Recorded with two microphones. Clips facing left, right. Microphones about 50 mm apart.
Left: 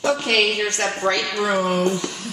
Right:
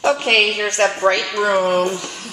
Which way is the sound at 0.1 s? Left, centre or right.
Right.